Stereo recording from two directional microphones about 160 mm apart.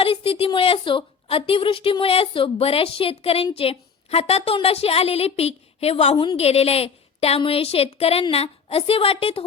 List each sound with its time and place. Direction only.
0.0 s a woman's voice: 35° left (ahead or behind)